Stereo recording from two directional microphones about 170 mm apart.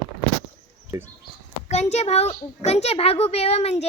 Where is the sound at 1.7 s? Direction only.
40° left (ahead or behind).